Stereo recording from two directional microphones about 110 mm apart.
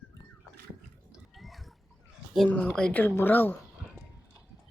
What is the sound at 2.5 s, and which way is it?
A woman's voice, 15° left (ahead or behind).